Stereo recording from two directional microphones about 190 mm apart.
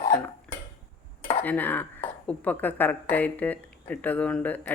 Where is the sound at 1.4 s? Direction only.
10° left (ahead or behind).